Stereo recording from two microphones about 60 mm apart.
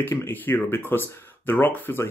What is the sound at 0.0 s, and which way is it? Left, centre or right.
Speech, left.